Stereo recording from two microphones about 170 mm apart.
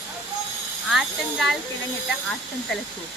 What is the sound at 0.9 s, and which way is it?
Speech, centre (ahead or behind).